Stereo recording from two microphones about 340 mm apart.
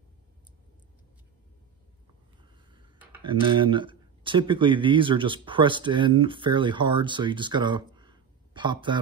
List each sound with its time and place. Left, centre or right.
2.7 s speech: centre